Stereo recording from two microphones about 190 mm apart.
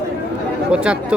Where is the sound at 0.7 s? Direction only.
5° right (ahead or behind).